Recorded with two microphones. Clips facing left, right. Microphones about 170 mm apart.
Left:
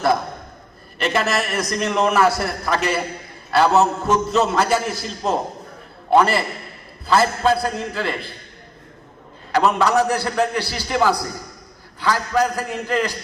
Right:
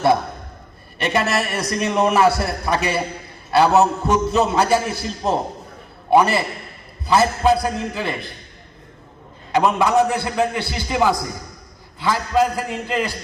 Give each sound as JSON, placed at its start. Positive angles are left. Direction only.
{"t": 1.0, "sound": "a man's voice", "side_deg": -15}
{"t": 9.5, "sound": "a man's voice", "side_deg": -15}